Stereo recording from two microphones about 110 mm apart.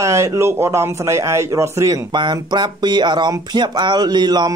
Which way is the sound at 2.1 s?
40° right (ahead or behind).